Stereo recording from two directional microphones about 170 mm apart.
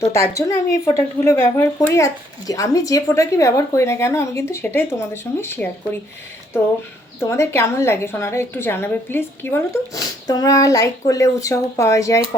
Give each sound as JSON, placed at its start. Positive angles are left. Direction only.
{"t": 0.0, "sound": "speech", "side_deg": 15}
{"t": 7.2, "sound": "speech", "side_deg": 15}